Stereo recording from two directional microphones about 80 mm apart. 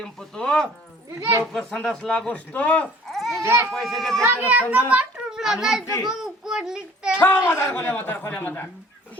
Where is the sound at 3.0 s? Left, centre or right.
Centre.